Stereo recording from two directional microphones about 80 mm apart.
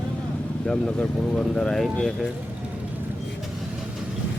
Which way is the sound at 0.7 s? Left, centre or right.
Centre.